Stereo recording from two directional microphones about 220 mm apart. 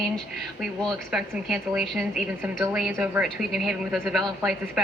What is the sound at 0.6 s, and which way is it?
A woman's voice, centre (ahead or behind).